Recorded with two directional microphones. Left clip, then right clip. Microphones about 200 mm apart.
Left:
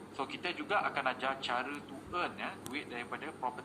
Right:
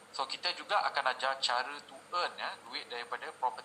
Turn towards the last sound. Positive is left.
turn(degrees=-15)  # may be behind; listen again after turning